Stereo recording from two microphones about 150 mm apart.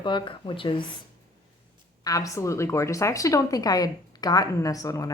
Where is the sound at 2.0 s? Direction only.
20° left (ahead or behind).